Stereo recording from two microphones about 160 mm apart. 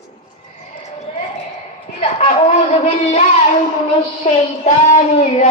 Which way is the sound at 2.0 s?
45° left (ahead or behind).